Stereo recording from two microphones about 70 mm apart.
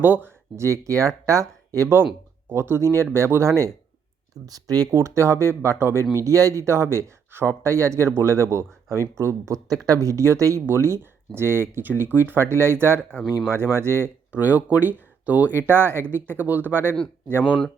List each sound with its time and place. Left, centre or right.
0.0 s speech: right
0.5 s speech: right
2.5 s speech: right
4.4 s speech: right
4.9 s speech: right
6.2 s speech: right
9.6 s speech: right
13.0 s speech: centre
13.5 s speech: right
14.3 s speech: right